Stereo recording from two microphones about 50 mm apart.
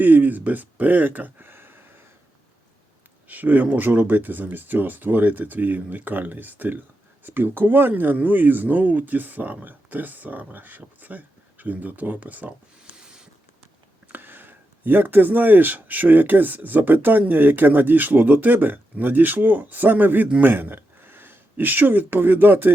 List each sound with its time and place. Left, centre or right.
0.0 s speech: right
3.2 s speech: right
12.8 s a sound: centre
14.1 s speech: right
20.4 s a sound: right
21.5 s speech: right